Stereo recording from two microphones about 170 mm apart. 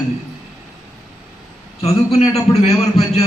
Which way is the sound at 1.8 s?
40° left (ahead or behind).